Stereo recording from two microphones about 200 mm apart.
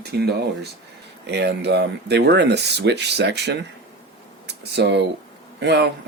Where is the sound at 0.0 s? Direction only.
55° right (ahead or behind).